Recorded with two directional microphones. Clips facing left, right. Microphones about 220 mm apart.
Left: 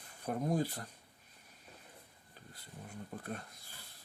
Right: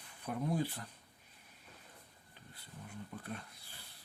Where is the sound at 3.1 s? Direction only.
40° left (ahead or behind).